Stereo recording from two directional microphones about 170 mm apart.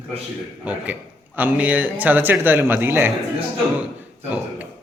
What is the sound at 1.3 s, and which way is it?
Speech, 10° right (ahead or behind).